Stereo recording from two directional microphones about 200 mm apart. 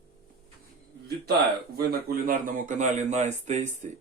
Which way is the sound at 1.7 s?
45° right (ahead or behind).